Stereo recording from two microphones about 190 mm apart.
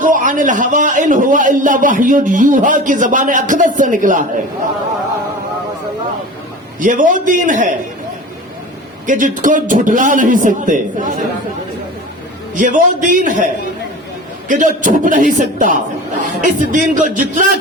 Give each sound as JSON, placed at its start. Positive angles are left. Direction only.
{"t": 0.0, "sound": "a man's voice", "side_deg": -45}
{"t": 6.7, "sound": "a man's voice", "side_deg": -45}
{"t": 9.0, "sound": "a man's voice", "side_deg": -45}
{"t": 12.5, "sound": "a man's voice", "side_deg": -45}